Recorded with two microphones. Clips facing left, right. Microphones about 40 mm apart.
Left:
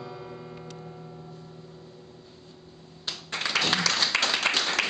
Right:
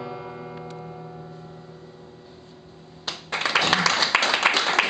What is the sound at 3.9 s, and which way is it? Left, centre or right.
Applause, centre.